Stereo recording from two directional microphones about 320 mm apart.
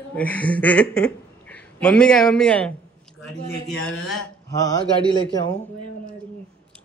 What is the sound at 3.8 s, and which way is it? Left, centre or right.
A man's voice, centre.